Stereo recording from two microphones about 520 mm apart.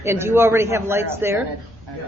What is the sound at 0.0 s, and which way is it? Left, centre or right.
A man's voice, centre.